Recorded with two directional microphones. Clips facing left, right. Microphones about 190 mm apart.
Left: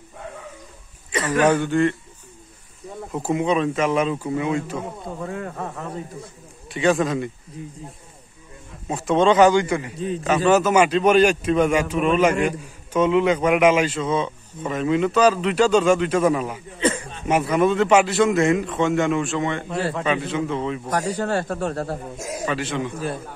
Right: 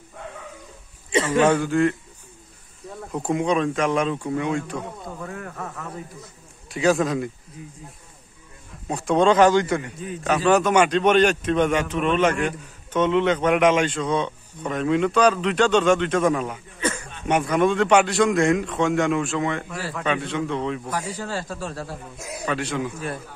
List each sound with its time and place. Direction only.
1.1 s a sound: 25° right (ahead or behind)
1.4 s a man's voice: centre (ahead or behind)
3.1 s a man's voice: centre (ahead or behind)
5.0 s a man's voice: 25° left (ahead or behind)
6.7 s a man's voice: centre (ahead or behind)
7.6 s a man's voice: 30° left (ahead or behind)
8.8 s a man's voice: centre (ahead or behind)
9.9 s a man's voice: 30° left (ahead or behind)
10.2 s a man's voice: centre (ahead or behind)
16.8 s a sound: 30° left (ahead or behind)
17.3 s a man's voice: 5° left (ahead or behind)
21.1 s speech: 60° left (ahead or behind)
22.4 s a man's voice: centre (ahead or behind)